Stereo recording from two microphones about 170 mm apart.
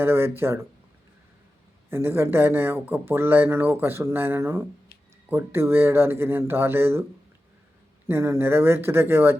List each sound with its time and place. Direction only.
0.0 s speech: 15° right (ahead or behind)
1.9 s speech: 15° right (ahead or behind)
8.0 s speech: 15° right (ahead or behind)